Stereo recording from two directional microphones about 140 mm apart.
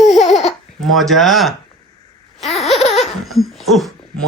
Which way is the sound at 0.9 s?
Centre (ahead or behind).